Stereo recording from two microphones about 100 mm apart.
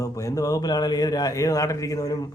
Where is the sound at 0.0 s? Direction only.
35° left (ahead or behind).